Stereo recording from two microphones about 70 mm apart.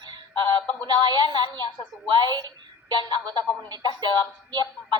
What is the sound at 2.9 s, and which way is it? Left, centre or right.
Speech, right.